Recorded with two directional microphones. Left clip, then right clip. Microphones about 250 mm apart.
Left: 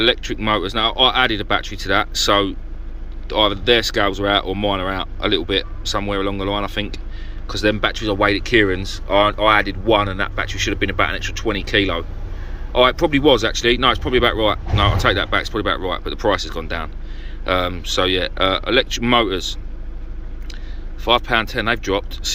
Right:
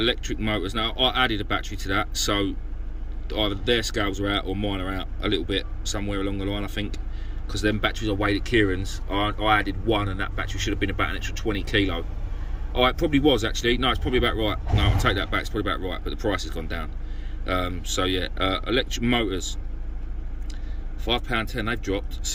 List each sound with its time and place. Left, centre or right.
0.0 s speech: centre
21.0 s speech: centre